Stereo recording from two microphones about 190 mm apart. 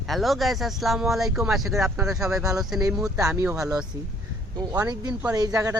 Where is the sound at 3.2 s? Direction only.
15° right (ahead or behind).